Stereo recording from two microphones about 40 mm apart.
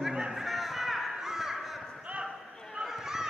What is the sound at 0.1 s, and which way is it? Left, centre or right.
Music, centre.